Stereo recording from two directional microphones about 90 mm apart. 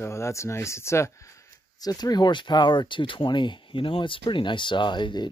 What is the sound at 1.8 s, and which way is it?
Speech, 45° left (ahead or behind).